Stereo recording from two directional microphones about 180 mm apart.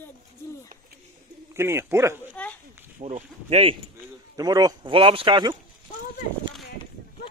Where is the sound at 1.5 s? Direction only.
15° right (ahead or behind).